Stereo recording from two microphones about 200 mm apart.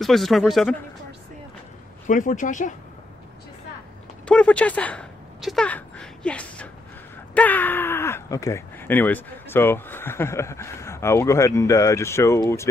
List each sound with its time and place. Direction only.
0.0 s speech: centre (ahead or behind)
2.0 s speech: 40° left (ahead or behind)
4.3 s speech: 5° left (ahead or behind)